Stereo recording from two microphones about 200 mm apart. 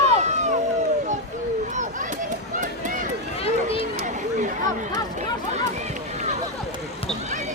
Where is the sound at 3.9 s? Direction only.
40° right (ahead or behind).